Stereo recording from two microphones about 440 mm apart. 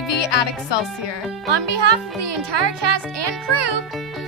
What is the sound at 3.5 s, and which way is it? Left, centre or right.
Music, right.